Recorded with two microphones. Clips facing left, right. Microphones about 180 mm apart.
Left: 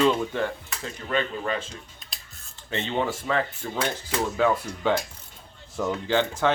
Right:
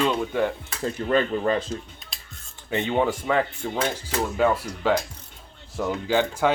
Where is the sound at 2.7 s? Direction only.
15° right (ahead or behind).